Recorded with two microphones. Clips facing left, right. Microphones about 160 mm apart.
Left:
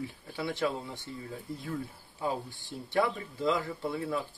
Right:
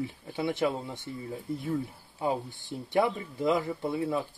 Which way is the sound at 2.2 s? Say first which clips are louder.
Right 3 dB; 20° right (ahead or behind).